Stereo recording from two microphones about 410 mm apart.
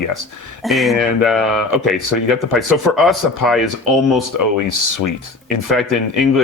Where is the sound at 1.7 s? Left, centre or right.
Left.